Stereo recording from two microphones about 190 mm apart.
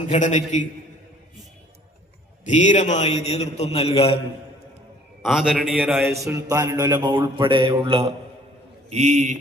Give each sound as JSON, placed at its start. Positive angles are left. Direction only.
{"t": 0.1, "sound": "a man's voice", "side_deg": 40}
{"t": 2.4, "sound": "a man's voice", "side_deg": 40}
{"t": 5.2, "sound": "a man's voice", "side_deg": 0}
{"t": 6.1, "sound": "a man's voice", "side_deg": -15}